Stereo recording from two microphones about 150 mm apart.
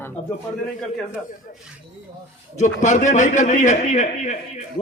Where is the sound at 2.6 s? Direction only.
55° left (ahead or behind).